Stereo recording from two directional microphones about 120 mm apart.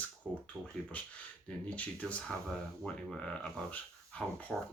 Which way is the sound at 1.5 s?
10° left (ahead or behind).